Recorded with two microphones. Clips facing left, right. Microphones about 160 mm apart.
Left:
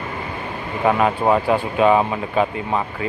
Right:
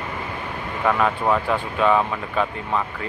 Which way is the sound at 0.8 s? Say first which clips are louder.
Left 3 dB; 25° left (ahead or behind).